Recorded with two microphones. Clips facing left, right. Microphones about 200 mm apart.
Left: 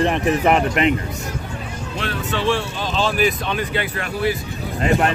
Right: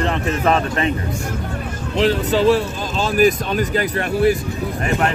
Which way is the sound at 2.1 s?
40° right (ahead or behind).